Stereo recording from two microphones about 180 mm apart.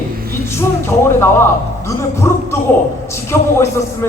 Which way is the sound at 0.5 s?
15° left (ahead or behind).